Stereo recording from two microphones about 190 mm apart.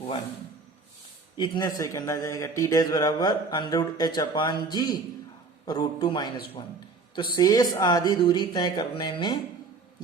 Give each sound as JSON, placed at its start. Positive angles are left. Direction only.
{"t": 1.4, "sound": "a man's voice", "side_deg": 20}